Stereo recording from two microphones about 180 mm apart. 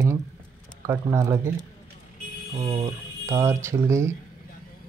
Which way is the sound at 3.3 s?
15° right (ahead or behind).